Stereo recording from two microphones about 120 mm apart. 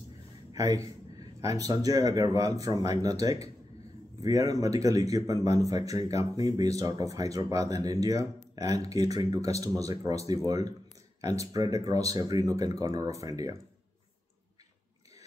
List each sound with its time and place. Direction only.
0.5 s speech: 30° right (ahead or behind)